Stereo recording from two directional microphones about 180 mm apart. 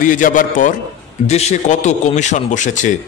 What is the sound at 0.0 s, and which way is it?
A man's voice, 45° left (ahead or behind).